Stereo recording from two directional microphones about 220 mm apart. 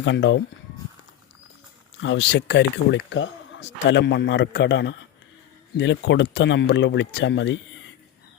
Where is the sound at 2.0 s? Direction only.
55° left (ahead or behind).